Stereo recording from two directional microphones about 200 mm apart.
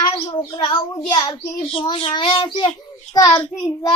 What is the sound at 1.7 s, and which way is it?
Child singing, 25° left (ahead or behind).